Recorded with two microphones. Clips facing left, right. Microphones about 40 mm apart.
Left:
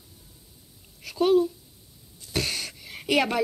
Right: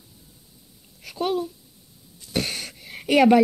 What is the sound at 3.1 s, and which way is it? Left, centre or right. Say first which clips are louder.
Speech: right 9 dB; centre.